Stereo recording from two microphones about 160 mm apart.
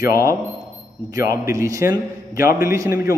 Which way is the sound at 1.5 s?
20° right (ahead or behind).